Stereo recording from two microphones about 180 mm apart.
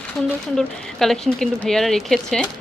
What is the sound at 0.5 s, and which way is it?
A woman's voice, centre (ahead or behind).